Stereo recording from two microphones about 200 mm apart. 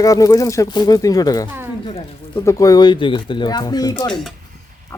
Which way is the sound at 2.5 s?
15° left (ahead or behind).